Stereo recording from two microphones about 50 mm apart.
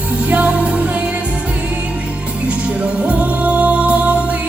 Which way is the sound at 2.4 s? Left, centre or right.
Right.